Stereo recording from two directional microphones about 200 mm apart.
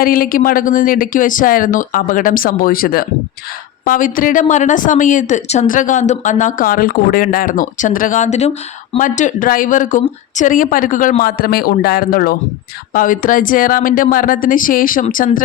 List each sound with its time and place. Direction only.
0.0 s a woman's voice: 45° left (ahead or behind)